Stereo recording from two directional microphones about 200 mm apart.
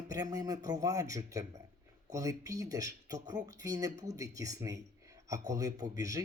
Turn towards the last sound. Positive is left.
turn(degrees=-15)  # may be behind; listen again after turning